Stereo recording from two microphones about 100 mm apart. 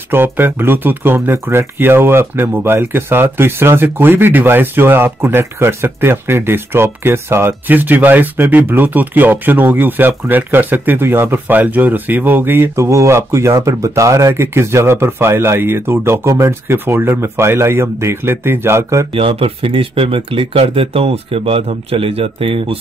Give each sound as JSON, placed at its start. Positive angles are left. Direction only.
{"t": 0.1, "sound": "speech", "side_deg": -20}
{"t": 19.1, "sound": "speech", "side_deg": -65}